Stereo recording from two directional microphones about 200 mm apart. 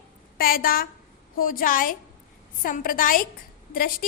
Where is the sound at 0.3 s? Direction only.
45° left (ahead or behind).